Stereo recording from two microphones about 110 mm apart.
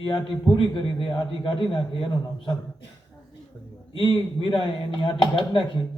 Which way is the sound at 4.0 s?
50° left (ahead or behind).